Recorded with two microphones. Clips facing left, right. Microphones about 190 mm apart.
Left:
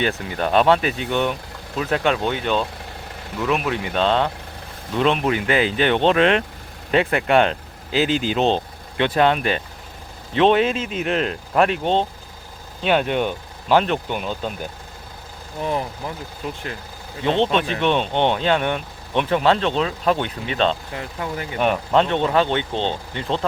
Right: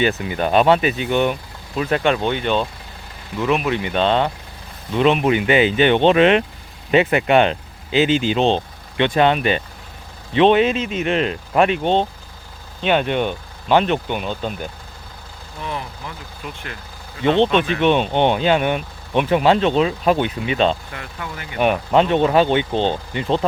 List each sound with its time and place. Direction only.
0.0 s speech: 5° right (ahead or behind)
15.6 s speech: 40° left (ahead or behind)
17.2 s speech: centre (ahead or behind)
20.9 s speech: 30° left (ahead or behind)
21.6 s speech: 5° right (ahead or behind)